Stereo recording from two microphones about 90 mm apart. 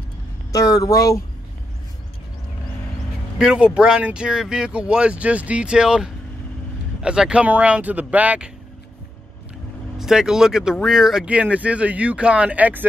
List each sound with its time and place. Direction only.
0.5 s speech: 40° left (ahead or behind)
3.3 s speech: 10° right (ahead or behind)
9.9 s speech: 5° right (ahead or behind)